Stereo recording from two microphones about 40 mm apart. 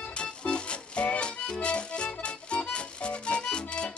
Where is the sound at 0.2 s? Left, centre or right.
Left.